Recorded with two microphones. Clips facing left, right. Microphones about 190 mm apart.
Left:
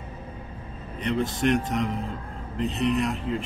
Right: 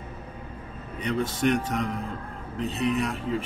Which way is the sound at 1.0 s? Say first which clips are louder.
Left 1 dB; centre (ahead or behind).